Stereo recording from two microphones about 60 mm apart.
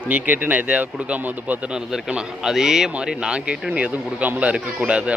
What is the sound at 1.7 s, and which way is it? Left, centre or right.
A man's voice, centre.